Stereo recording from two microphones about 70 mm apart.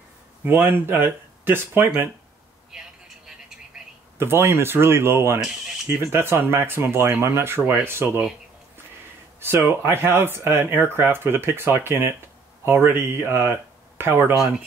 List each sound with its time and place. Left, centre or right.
0.5 s speech: right
3.3 s a sound: centre
4.2 s speech: right
9.4 s speech: right